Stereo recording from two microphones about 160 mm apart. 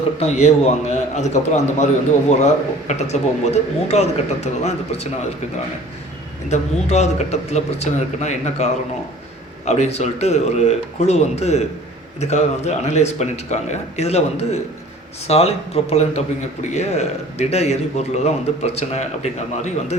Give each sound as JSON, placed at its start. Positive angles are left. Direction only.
{"t": 0.2, "sound": "a man's voice", "side_deg": 45}
{"t": 6.5, "sound": "a man's voice", "side_deg": 45}